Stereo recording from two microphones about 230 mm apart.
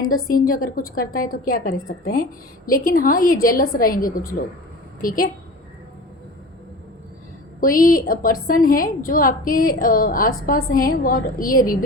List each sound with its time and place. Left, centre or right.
0.0 s a woman's voice: left
0.5 s a woman's voice: left
7.6 s a woman's voice: left